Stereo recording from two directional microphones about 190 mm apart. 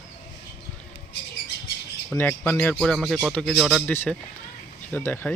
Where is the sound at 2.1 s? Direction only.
10° left (ahead or behind).